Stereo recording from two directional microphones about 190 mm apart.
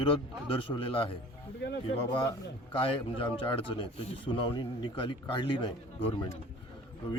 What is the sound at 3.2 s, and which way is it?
Speech, 25° left (ahead or behind).